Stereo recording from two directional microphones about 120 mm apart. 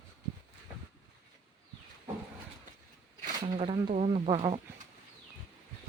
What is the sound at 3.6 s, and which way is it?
Speech, 50° right (ahead or behind).